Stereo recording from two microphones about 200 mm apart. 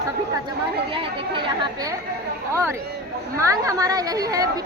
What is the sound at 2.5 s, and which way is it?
A woman's voice, 10° right (ahead or behind).